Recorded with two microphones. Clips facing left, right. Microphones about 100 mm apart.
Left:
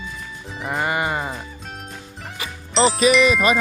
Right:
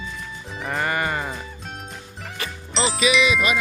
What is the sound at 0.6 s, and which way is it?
Music, 10° left (ahead or behind).